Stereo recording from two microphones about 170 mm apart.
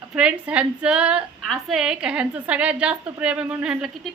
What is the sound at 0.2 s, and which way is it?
A woman's voice, 5° right (ahead or behind).